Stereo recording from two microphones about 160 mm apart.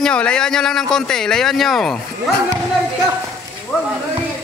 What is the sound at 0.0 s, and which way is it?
Speech, 5° left (ahead or behind).